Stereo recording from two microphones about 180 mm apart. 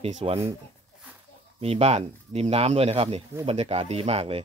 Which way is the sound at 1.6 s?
35° right (ahead or behind).